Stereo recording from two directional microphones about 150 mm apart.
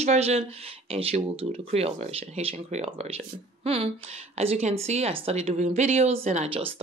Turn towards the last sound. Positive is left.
turn(degrees=-45)  # may be behind; listen again after turning